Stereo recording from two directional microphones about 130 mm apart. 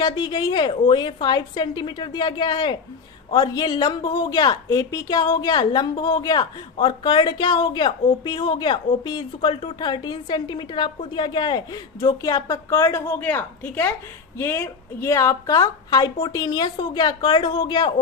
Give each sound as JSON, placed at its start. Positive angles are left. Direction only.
{"t": 0.0, "sound": "a woman's voice", "side_deg": 30}